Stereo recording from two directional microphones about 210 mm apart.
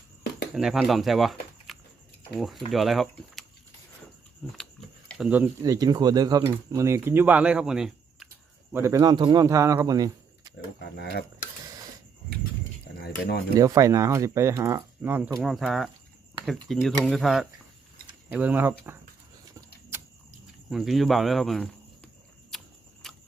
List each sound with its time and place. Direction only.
0.5 s speech: centre (ahead or behind)
4.5 s speech: 5° left (ahead or behind)
8.7 s speech: 15° right (ahead or behind)
10.8 s speech: 50° left (ahead or behind)
13.6 s speech: 15° right (ahead or behind)
20.7 s cricket: centre (ahead or behind)
23.0 s a sound: centre (ahead or behind)